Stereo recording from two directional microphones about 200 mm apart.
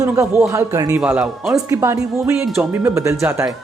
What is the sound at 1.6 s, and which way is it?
Speech, 15° right (ahead or behind).